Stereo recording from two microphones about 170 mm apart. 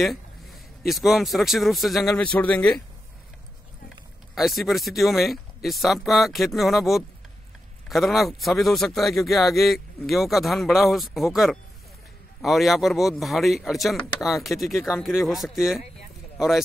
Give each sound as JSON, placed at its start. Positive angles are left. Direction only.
{"t": 0.0, "sound": "speech", "side_deg": 0}
{"t": 4.4, "sound": "a man's voice", "side_deg": 0}